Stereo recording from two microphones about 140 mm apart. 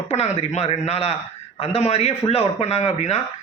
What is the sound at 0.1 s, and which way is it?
Speech, 50° left (ahead or behind).